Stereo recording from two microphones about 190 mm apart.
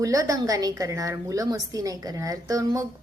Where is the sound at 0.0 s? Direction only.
15° right (ahead or behind).